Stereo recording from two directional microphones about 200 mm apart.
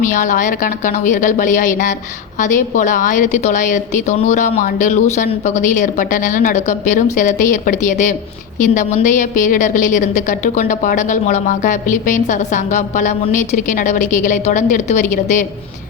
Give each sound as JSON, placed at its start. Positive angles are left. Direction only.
{"t": 0.0, "sound": "a woman's voice", "side_deg": 40}